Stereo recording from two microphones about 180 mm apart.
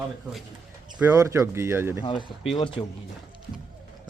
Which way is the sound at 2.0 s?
25° left (ahead or behind).